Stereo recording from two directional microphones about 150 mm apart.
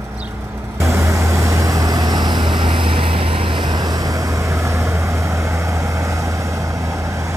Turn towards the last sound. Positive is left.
turn(degrees=-20)  # may be behind; listen again after turning